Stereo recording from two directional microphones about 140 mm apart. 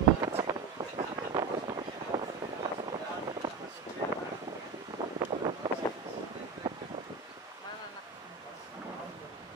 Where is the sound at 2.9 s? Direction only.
35° right (ahead or behind).